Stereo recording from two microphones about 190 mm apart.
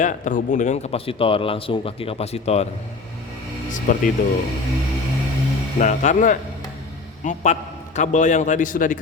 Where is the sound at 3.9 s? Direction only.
45° left (ahead or behind).